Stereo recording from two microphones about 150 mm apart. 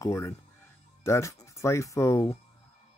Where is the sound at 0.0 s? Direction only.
20° left (ahead or behind).